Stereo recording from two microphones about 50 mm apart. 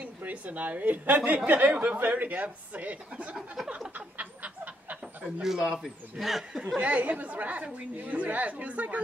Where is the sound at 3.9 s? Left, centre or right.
Right.